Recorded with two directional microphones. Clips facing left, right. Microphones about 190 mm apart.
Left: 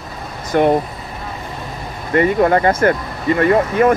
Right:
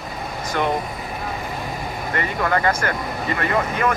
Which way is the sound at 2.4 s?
25° left (ahead or behind).